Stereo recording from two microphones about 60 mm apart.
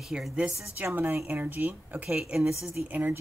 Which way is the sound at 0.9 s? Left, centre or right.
Right.